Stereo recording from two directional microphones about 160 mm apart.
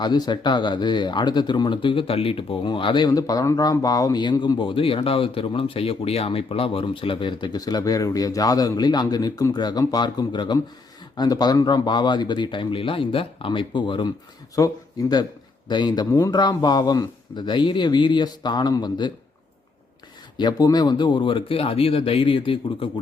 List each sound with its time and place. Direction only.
0.0 s speech: 25° left (ahead or behind)
20.3 s speech: 25° left (ahead or behind)